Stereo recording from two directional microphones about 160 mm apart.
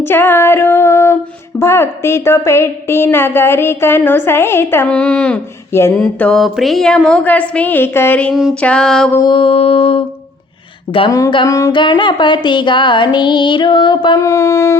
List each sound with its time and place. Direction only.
0.0 s female singing: 15° left (ahead or behind)
6.0 s a woman's voice: 5° left (ahead or behind)
8.3 s a sound: 5° right (ahead or behind)
9.2 s mantra: 30° left (ahead or behind)
11.2 s music: 25° left (ahead or behind)